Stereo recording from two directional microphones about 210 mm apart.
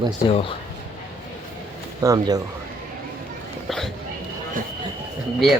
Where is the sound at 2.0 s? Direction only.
15° right (ahead or behind).